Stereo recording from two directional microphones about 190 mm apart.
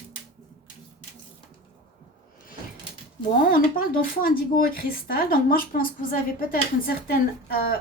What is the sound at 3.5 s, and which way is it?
Speech, 50° left (ahead or behind).